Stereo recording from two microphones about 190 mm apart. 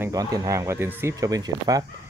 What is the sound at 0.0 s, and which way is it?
Speech, 20° right (ahead or behind).